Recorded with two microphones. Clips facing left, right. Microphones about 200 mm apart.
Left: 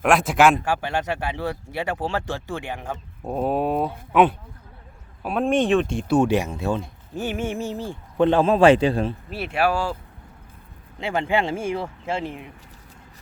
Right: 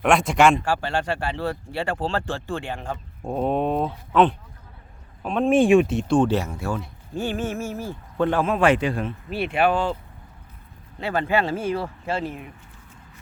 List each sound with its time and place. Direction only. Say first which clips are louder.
0.0 s speech: even; centre (ahead or behind)
0.8 s speech: even; 15° left (ahead or behind)
5.5 s speech: right 4 dB; 10° right (ahead or behind); by 9.1 s 30° left (ahead or behind)
9.3 s speech: right 3 dB; 5° left (ahead or behind)
11.0 s speech: even; 15° left (ahead or behind)